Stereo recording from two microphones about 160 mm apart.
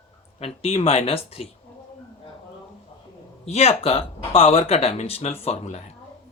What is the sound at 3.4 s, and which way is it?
Speech, 40° left (ahead or behind).